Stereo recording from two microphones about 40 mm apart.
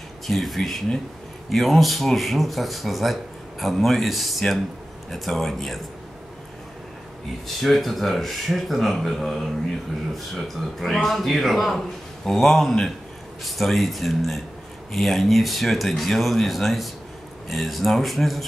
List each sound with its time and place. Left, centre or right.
0.3 s speech: centre
7.4 s a man's voice: centre